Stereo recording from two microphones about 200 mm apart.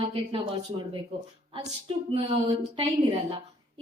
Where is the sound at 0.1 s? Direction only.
25° right (ahead or behind).